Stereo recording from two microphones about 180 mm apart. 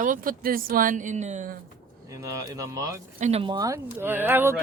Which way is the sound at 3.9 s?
10° right (ahead or behind).